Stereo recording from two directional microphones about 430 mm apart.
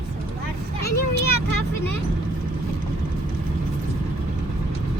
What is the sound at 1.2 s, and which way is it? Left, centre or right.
Speech, left.